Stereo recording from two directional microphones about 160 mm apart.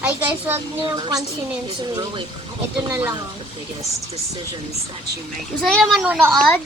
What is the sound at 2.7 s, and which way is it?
Speech, 5° right (ahead or behind).